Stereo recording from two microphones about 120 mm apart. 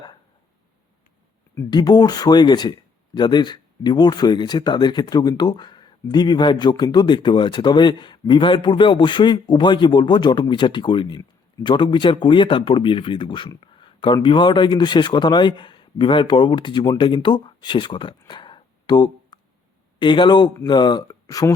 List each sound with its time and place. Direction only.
1.7 s speech: 35° left (ahead or behind)